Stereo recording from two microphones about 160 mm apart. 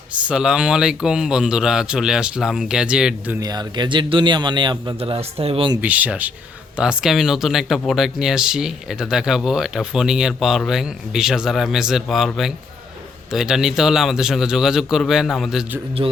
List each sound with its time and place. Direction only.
0.3 s speech: 5° right (ahead or behind)
3.4 s a man's voice: 25° right (ahead or behind)
5.8 s speech: 10° right (ahead or behind)
16.0 s a man's voice: 30° right (ahead or behind)